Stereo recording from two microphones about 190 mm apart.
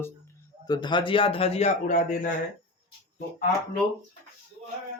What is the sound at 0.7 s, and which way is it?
A man's voice, 25° left (ahead or behind).